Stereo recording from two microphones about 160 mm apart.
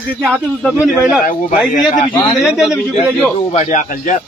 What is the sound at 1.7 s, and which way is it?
Speech, 55° left (ahead or behind).